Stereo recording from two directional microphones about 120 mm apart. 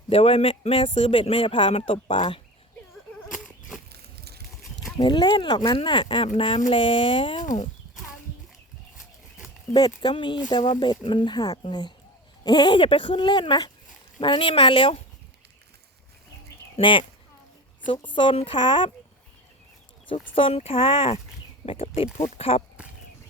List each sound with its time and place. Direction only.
0.1 s speech: 55° left (ahead or behind)
4.6 s a sound: centre (ahead or behind)
4.9 s speech: 35° left (ahead or behind)
7.4 s speech: 90° left
9.7 s speech: 35° left (ahead or behind)
16.7 s speech: 45° left (ahead or behind)
20.1 s speech: 50° left (ahead or behind)